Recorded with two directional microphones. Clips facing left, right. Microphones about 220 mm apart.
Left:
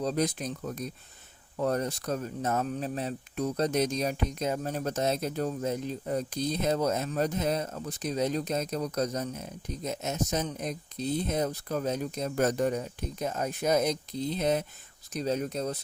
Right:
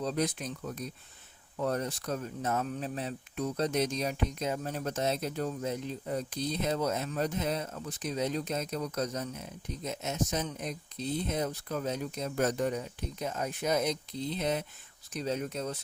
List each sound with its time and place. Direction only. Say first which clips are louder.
0.0 s speech: left 3 dB; 35° left (ahead or behind)